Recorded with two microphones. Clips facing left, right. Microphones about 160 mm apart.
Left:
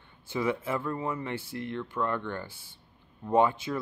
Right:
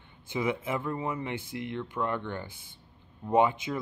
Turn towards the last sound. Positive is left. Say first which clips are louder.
# even
turn(degrees=-15)  # may be behind; listen again after turning